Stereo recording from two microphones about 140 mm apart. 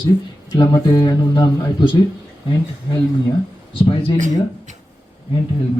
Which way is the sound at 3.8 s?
40° left (ahead or behind).